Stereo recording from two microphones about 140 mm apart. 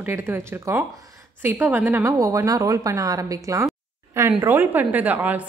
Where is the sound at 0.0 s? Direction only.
15° right (ahead or behind).